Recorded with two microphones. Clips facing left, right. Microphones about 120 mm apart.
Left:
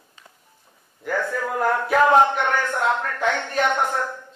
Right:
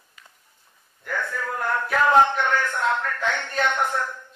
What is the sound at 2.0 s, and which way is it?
Speech, 25° left (ahead or behind).